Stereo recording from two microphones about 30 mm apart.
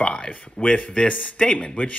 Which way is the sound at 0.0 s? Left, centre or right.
Left.